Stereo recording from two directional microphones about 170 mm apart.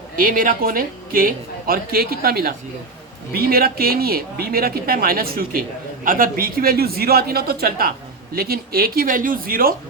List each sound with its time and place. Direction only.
0.2 s a man's voice: 55° right (ahead or behind)